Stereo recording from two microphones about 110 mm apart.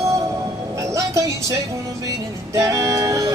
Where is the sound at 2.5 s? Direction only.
30° right (ahead or behind).